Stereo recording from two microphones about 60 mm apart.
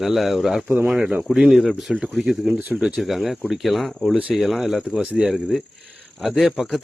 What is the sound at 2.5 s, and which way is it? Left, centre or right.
Speech, right.